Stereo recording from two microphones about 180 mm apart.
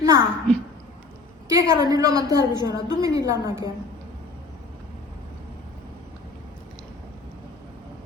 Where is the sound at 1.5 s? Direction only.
20° right (ahead or behind).